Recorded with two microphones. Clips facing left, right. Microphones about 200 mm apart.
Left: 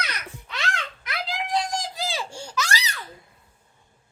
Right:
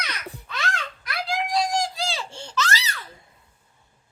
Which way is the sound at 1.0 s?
20° left (ahead or behind).